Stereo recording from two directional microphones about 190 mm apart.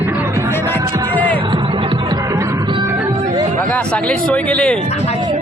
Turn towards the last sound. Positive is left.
turn(degrees=35)  # may be behind; listen again after turning